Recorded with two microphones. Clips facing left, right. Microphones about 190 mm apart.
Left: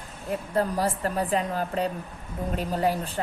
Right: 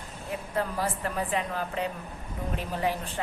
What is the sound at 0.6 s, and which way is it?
A woman's voice, 40° left (ahead or behind).